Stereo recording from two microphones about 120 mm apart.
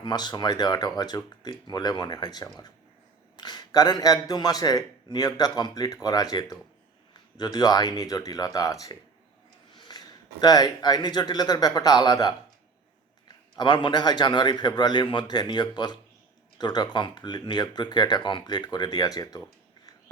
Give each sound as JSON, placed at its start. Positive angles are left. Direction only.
{"t": 0.0, "sound": "a man's voice", "side_deg": 35}